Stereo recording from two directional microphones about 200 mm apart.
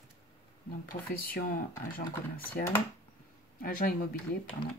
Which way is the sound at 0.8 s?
45° left (ahead or behind).